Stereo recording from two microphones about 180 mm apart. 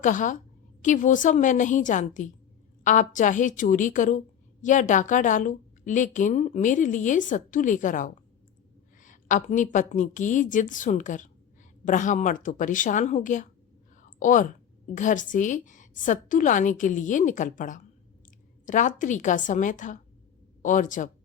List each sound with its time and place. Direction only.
0.0 s a woman's voice: 45° left (ahead or behind)